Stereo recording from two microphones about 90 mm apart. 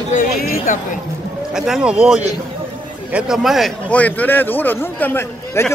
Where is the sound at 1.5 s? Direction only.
5° right (ahead or behind).